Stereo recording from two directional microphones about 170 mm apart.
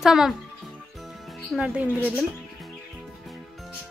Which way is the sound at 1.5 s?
10° right (ahead or behind).